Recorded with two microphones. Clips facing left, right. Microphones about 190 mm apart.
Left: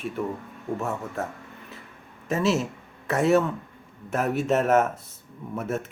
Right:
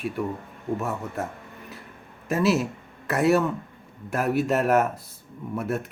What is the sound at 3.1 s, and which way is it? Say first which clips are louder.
Speech: even; centre (ahead or behind).